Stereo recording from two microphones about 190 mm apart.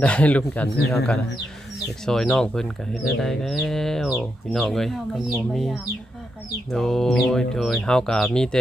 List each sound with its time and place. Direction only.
0.0 s speech: 5° left (ahead or behind)